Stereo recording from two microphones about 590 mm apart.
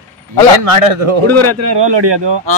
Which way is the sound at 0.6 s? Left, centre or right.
Right.